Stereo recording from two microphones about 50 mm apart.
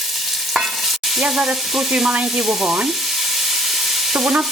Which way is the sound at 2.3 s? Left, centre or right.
Centre.